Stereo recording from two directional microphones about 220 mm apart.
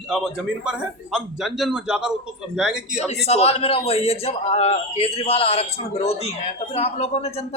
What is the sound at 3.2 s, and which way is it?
A man's voice, 30° left (ahead or behind).